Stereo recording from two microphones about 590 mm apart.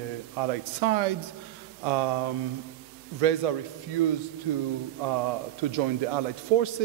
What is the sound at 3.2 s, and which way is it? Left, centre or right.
Speech, right.